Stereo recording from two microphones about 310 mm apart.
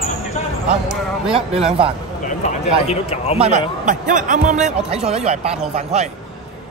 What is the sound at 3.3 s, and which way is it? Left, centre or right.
Speech, centre.